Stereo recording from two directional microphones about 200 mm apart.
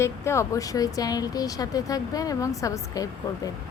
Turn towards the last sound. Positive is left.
turn(degrees=15)  # may be behind; listen again after turning